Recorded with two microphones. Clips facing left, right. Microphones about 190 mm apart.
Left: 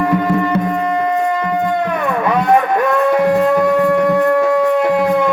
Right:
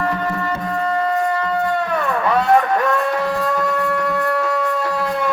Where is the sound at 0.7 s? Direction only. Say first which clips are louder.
Left 3 dB; 15° left (ahead or behind).